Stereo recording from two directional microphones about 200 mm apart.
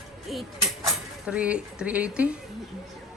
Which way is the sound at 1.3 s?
5° right (ahead or behind).